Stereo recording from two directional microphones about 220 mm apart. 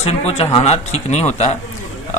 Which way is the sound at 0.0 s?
25° left (ahead or behind).